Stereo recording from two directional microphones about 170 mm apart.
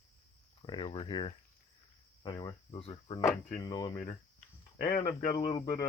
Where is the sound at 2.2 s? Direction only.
30° left (ahead or behind).